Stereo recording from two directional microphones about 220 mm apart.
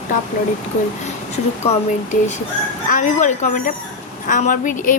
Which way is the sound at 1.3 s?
30° left (ahead or behind).